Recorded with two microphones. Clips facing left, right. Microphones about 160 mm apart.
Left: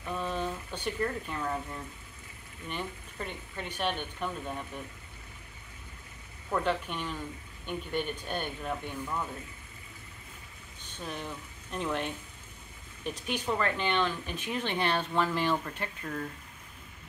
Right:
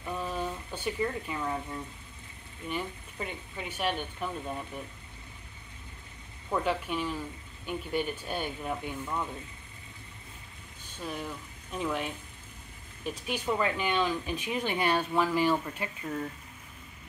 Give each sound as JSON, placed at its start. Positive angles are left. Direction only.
{"t": 0.1, "sound": "speech", "side_deg": -5}
{"t": 6.5, "sound": "speech", "side_deg": -5}
{"t": 11.1, "sound": "speech", "side_deg": -5}